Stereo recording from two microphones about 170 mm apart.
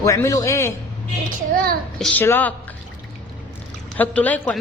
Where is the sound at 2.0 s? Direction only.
5° left (ahead or behind).